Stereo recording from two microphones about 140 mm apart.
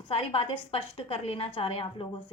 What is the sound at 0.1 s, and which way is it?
A woman's voice, 45° left (ahead or behind).